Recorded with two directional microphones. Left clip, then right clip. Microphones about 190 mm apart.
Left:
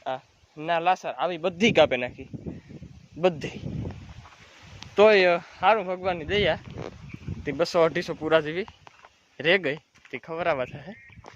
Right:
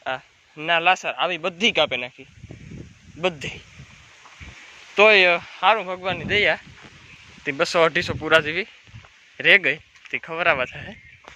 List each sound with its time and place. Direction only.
0.0 s speech: centre (ahead or behind)
1.5 s a man's voice: 40° left (ahead or behind)
3.2 s speech: 25° left (ahead or behind)
4.9 s speech: 25° left (ahead or behind)